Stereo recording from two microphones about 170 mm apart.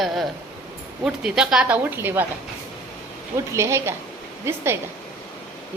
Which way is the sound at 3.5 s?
15° right (ahead or behind).